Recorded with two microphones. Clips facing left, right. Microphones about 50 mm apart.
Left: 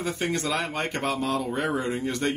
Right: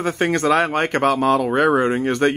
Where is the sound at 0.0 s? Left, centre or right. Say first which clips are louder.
Right 9 dB; right.